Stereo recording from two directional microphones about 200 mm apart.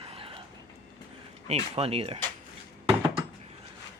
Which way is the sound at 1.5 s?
30° right (ahead or behind).